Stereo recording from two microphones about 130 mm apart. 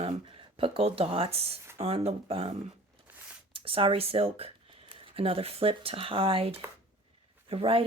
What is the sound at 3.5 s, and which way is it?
Speech, 45° right (ahead or behind).